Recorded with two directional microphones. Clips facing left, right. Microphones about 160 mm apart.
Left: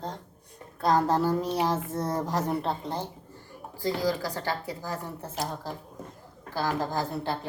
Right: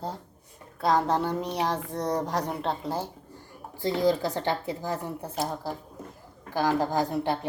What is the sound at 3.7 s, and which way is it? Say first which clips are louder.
Speech: right 4 dB; 25° right (ahead or behind).